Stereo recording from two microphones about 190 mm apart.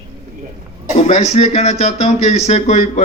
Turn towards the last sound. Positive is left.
turn(degrees=35)  # may be behind; listen again after turning